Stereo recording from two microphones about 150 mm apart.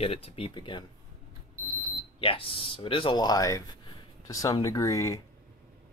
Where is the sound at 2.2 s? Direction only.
40° left (ahead or behind); by 5.2 s 20° left (ahead or behind).